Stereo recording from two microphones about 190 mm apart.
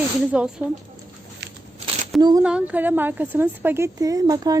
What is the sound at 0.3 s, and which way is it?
Speech, 5° right (ahead or behind).